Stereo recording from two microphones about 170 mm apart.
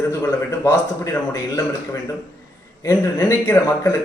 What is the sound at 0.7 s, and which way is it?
Speech, 15° left (ahead or behind).